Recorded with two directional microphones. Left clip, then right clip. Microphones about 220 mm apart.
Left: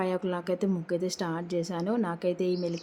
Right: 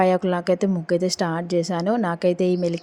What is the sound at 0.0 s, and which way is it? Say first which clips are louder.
A woman's voice: right 11 dB; 30° right (ahead or behind).